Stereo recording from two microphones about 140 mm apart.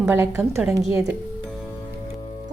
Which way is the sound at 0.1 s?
15° right (ahead or behind).